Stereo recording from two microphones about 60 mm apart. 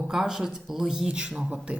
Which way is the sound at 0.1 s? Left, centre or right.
Centre.